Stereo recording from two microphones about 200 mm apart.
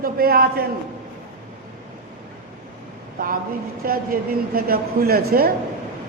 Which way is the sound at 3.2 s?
45° right (ahead or behind).